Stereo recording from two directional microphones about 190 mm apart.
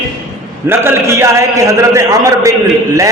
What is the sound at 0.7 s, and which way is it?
A man's voice, 15° right (ahead or behind).